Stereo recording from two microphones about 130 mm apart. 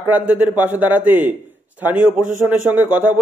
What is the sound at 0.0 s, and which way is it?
A man's voice, 15° right (ahead or behind).